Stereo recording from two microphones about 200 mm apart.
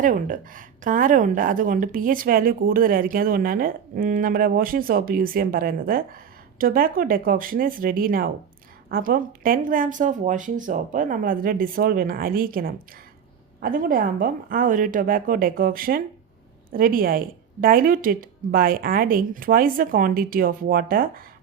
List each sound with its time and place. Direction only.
0.0 s a woman's voice: 40° right (ahead or behind)